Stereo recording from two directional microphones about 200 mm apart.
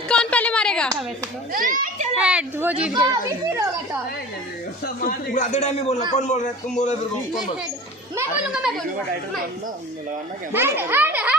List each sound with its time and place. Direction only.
0.1 s a sound: 5° left (ahead or behind)
1.5 s a child's voice: 40° right (ahead or behind)
2.1 s a child's voice: 5° right (ahead or behind)
4.9 s a man's voice: 40° left (ahead or behind)
8.1 s a child's voice: 5° right (ahead or behind)
10.5 s a child's voice: 10° right (ahead or behind)